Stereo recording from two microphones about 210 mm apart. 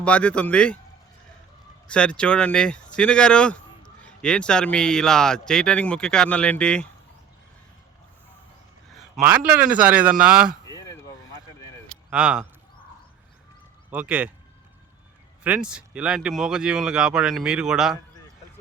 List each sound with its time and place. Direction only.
0.0 s speech: 5° left (ahead or behind)
1.9 s speech: 5° left (ahead or behind)
8.9 s a man's voice: 5° right (ahead or behind)
10.7 s a sound: 15° left (ahead or behind)
12.1 s speech: 5° right (ahead or behind)
13.9 s a man's voice: 5° right (ahead or behind)
15.4 s speech: 5° right (ahead or behind)